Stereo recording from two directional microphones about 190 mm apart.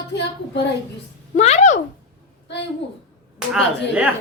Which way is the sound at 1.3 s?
35° left (ahead or behind).